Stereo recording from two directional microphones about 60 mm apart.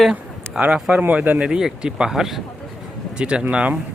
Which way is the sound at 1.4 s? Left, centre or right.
Centre.